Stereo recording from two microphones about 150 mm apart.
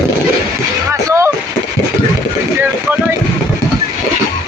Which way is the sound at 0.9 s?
20° right (ahead or behind).